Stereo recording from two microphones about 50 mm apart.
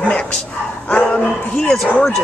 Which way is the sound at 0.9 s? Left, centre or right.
Centre.